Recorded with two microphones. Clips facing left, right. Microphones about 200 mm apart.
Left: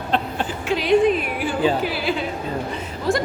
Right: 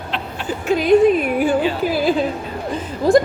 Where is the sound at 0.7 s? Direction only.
40° right (ahead or behind).